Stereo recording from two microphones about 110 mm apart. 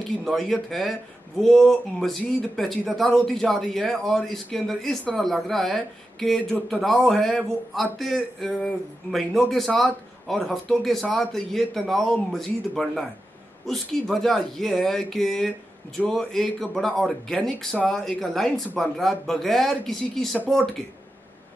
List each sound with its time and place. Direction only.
0.2 s a man's voice: centre (ahead or behind)